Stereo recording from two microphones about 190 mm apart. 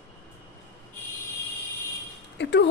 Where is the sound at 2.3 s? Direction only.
70° left (ahead or behind).